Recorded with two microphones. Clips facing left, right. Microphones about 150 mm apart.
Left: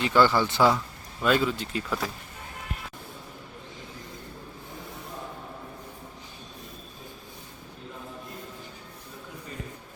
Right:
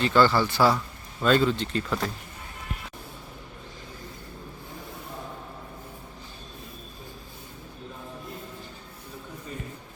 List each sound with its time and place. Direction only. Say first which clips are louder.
0.0 s speech: right 1 dB; 15° left (ahead or behind)
1.2 s speech: right 2 dB; 10° left (ahead or behind)